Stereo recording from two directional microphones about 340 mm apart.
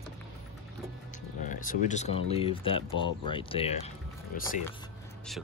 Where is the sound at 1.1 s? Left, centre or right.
Left.